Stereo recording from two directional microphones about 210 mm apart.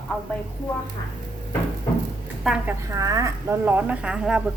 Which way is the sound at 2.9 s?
15° right (ahead or behind).